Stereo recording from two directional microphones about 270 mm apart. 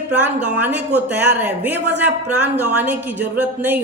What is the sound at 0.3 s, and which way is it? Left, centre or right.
A woman's voice, centre.